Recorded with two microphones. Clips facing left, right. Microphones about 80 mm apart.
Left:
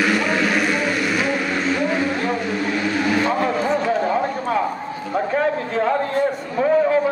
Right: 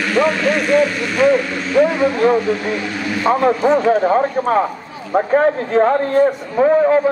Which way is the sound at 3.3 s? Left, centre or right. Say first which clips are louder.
Right 6 dB; right.